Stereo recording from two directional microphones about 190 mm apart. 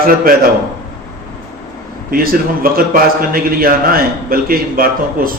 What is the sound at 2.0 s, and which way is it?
A man's voice, 50° right (ahead or behind).